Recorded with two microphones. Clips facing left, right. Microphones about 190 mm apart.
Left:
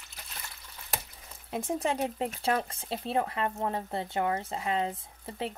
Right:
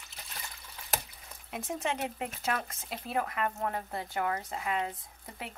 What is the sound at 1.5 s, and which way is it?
Speech, 30° left (ahead or behind).